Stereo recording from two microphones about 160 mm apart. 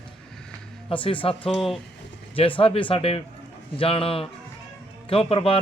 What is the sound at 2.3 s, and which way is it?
A man's voice, 35° left (ahead or behind).